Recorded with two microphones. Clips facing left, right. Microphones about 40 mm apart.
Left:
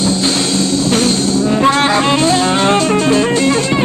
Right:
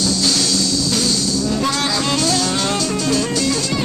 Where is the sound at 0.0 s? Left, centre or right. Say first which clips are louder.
Left 4 dB; left.